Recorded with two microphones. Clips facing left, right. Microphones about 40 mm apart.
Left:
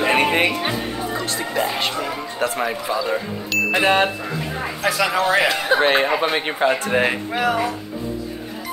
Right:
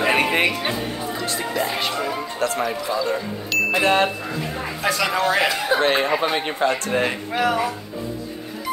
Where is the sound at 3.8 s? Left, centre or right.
Centre.